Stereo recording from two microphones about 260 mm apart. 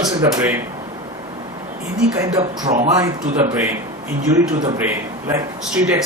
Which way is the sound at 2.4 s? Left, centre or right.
Right.